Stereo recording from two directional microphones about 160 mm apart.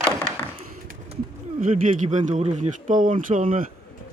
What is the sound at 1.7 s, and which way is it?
Speech, 45° right (ahead or behind).